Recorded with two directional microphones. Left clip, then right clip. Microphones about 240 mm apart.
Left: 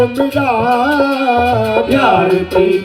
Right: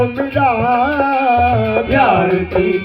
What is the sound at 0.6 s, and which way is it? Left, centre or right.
Music, left.